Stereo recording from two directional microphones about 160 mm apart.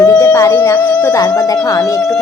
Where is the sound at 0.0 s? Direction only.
25° left (ahead or behind).